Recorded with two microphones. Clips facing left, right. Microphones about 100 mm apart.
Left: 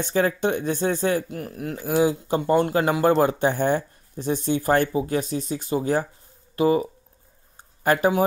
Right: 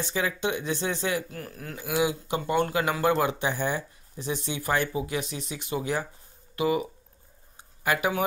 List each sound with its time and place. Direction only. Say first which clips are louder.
0.0 s speech: left 6 dB; 50° left (ahead or behind)
1.3 s speech: left 8 dB; 25° left (ahead or behind)
1.8 s speech: left 5 dB; 35° left (ahead or behind)
7.5 s a sound: left 6 dB; 45° left (ahead or behind)